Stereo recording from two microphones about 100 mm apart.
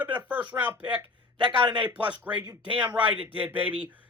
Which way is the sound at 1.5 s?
50° right (ahead or behind).